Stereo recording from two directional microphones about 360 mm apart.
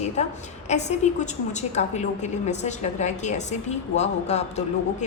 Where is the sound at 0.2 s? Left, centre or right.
Centre.